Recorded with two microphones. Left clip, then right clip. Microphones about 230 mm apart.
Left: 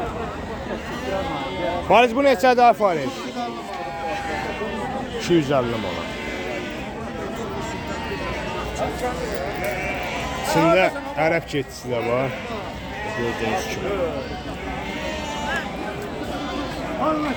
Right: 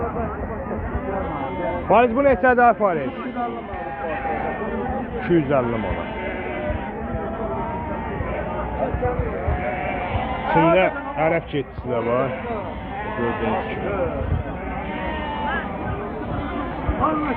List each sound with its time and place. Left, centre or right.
1.9 s a man's voice: left
5.4 s a man's voice: left
10.5 s a man's voice: left